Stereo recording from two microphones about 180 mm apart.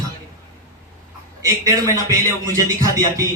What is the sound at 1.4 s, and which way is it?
A man's voice, 15° right (ahead or behind).